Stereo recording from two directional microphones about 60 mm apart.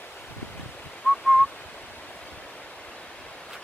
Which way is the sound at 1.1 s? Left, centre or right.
Left.